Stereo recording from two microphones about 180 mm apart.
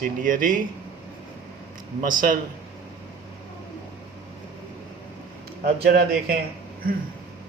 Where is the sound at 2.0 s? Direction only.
50° right (ahead or behind).